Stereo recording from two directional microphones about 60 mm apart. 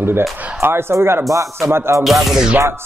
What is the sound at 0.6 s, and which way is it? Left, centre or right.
Speech, right.